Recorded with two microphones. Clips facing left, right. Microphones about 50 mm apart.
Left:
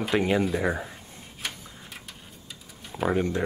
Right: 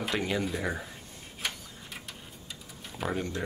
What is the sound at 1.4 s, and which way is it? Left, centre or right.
Printer, centre.